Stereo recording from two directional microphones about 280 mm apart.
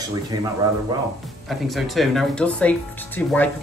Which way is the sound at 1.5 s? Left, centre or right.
Centre.